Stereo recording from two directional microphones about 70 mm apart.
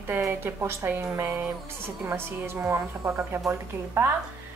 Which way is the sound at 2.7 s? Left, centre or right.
Right.